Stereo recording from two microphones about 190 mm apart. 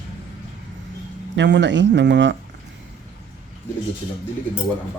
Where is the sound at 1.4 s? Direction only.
70° right (ahead or behind).